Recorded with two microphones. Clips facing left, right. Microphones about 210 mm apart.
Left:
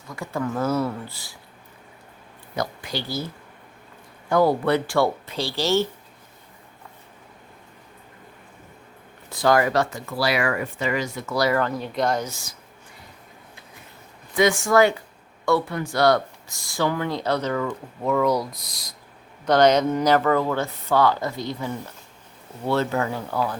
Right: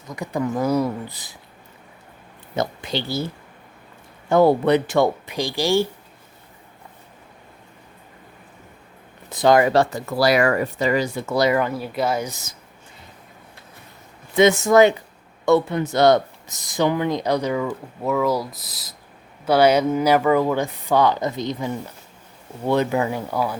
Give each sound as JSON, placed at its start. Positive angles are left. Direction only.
{"t": 0.1, "sound": "speech", "side_deg": -15}
{"t": 2.6, "sound": "speech", "side_deg": -25}
{"t": 4.3, "sound": "speech", "side_deg": -25}
{"t": 9.3, "sound": "speech", "side_deg": -20}
{"t": 12.3, "sound": "speech", "side_deg": -20}
{"t": 14.3, "sound": "speech", "side_deg": -20}